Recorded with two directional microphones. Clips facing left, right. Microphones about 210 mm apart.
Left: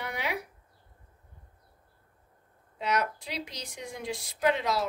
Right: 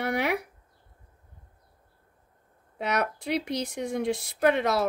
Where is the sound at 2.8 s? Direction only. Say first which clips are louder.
Right 2 dB; 60° right (ahead or behind).